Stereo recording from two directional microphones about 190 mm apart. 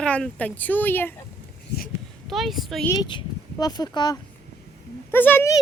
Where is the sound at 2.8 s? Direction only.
25° left (ahead or behind).